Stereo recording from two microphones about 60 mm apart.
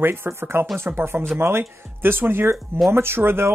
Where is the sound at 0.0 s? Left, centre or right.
Right.